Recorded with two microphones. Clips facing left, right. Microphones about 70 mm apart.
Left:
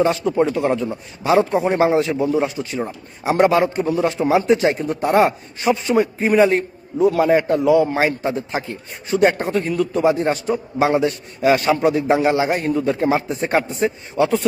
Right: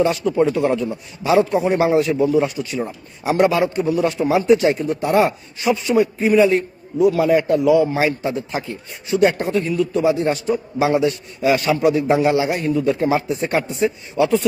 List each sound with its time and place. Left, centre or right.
0.5 s speech: left
7.9 s speech: left